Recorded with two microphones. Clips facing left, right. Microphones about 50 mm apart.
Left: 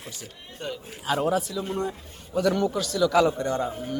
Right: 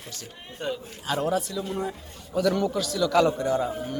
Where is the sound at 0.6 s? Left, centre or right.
Centre.